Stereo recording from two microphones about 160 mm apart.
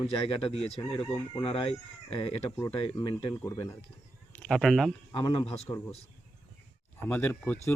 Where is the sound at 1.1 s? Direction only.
30° left (ahead or behind).